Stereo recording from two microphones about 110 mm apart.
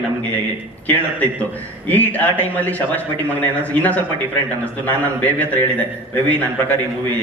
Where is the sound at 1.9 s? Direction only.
15° left (ahead or behind).